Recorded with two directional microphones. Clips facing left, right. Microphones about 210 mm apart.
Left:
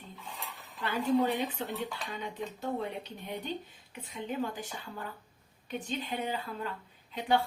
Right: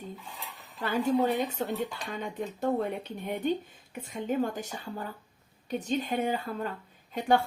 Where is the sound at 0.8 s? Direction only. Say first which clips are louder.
Right 2 dB; 45° right (ahead or behind).